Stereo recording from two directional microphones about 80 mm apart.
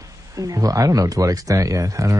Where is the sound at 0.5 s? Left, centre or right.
Right.